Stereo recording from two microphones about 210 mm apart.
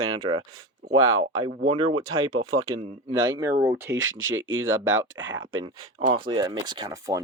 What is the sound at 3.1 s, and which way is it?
Speech, 20° right (ahead or behind).